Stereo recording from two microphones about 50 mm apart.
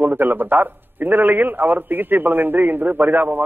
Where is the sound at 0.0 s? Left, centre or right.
Right.